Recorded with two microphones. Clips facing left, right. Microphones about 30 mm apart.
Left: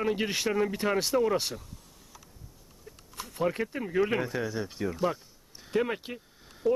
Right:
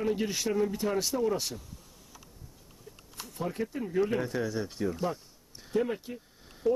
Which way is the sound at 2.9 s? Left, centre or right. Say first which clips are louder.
Left 1 dB; left.